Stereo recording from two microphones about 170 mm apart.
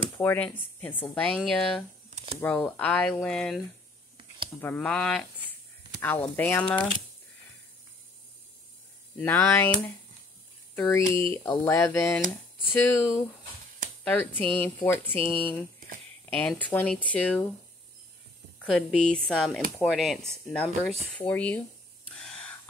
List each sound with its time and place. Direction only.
0.2 s a woman's voice: 10° left (ahead or behind)
9.2 s a woman's voice: 10° left (ahead or behind)
10.7 s a woman's voice: 15° left (ahead or behind)
18.6 s a woman's voice: 5° left (ahead or behind)
22.1 s gasp: 5° left (ahead or behind)